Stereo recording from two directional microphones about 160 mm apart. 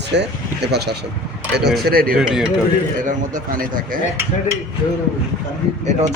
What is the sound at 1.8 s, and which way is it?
Speech, 70° right (ahead or behind).